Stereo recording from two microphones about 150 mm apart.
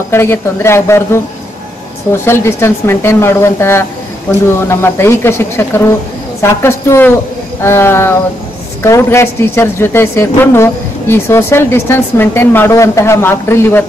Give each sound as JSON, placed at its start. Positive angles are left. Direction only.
{"t": 0.1, "sound": "speech", "side_deg": 15}
{"t": 2.2, "sound": "speech", "side_deg": 15}